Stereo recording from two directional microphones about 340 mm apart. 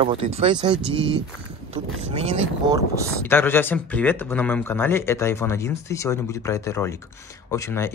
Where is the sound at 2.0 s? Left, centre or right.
Centre.